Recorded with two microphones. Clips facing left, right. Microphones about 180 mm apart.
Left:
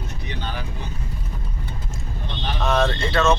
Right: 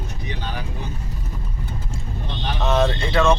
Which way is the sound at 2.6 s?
20° right (ahead or behind).